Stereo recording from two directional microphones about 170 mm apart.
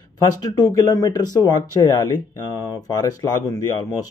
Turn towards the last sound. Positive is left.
turn(degrees=20)  # may be behind; listen again after turning